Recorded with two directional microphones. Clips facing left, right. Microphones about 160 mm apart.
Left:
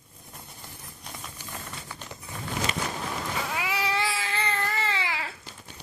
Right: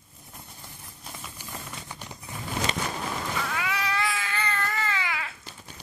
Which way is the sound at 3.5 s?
25° left (ahead or behind).